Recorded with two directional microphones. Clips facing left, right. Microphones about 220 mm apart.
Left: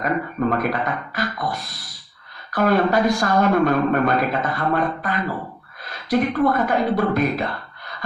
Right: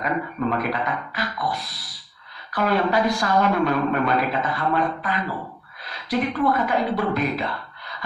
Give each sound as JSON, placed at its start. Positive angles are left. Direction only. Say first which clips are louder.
{"t": 0.0, "sound": "speech", "louder": "left 3 dB", "side_deg": 45}